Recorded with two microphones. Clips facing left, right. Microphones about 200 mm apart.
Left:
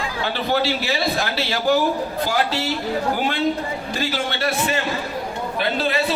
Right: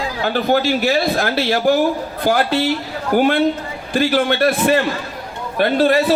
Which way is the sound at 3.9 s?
55° right (ahead or behind).